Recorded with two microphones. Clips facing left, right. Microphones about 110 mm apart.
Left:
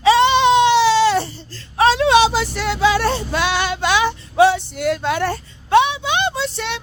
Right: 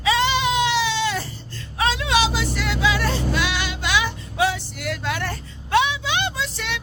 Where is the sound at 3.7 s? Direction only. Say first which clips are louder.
Left 5 dB; 35° left (ahead or behind).